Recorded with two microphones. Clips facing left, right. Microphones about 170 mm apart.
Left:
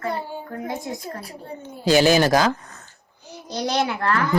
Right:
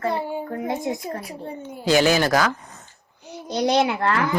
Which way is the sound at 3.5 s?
20° right (ahead or behind).